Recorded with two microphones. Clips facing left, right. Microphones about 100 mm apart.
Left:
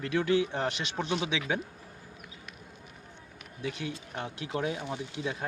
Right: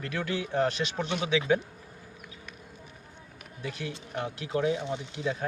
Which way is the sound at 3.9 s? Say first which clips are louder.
Right 3 dB; 25° right (ahead or behind).